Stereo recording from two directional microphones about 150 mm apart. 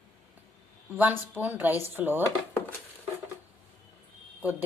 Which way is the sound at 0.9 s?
10° right (ahead or behind).